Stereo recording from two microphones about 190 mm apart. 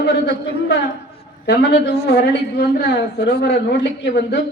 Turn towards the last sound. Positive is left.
turn(degrees=60)  # may be behind; listen again after turning